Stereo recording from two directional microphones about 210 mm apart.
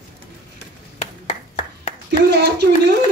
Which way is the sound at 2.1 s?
50° right (ahead or behind).